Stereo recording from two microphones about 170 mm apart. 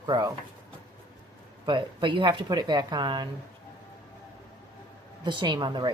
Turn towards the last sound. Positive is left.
turn(degrees=-25)  # may be behind; listen again after turning